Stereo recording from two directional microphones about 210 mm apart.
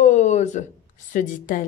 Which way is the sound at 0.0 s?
35° left (ahead or behind).